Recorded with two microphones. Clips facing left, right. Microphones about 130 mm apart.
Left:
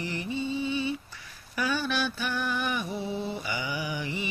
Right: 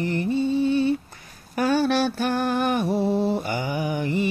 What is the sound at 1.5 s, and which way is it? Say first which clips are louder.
Mantra: right 9 dB; 60° right (ahead or behind).